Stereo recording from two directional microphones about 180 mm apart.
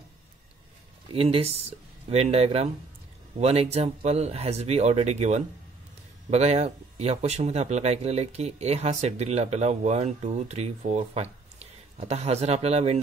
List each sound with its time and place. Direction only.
1.1 s speech: 30° right (ahead or behind)